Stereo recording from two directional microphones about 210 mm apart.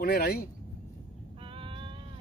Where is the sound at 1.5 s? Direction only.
25° right (ahead or behind).